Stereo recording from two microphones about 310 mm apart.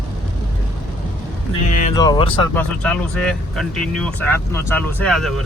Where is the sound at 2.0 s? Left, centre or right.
Centre.